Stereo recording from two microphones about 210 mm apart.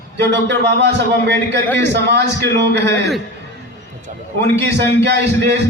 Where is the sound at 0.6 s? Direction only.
55° right (ahead or behind).